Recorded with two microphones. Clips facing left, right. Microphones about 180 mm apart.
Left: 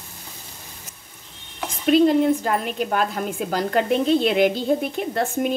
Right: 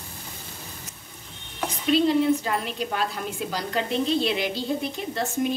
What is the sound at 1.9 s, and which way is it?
A woman's voice, 50° left (ahead or behind).